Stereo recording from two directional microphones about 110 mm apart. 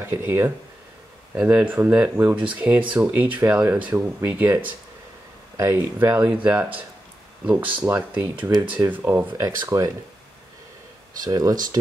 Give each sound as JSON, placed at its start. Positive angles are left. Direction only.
{"t": 0.0, "sound": "speech", "side_deg": -20}
{"t": 5.6, "sound": "speech", "side_deg": -25}
{"t": 6.1, "sound": "speech", "side_deg": -15}
{"t": 7.8, "sound": "speech", "side_deg": -20}
{"t": 11.1, "sound": "speech", "side_deg": -35}